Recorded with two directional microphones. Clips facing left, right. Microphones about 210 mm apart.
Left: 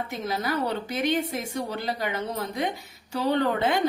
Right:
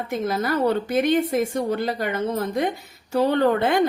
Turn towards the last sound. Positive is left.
turn(degrees=-55)  # may be behind; listen again after turning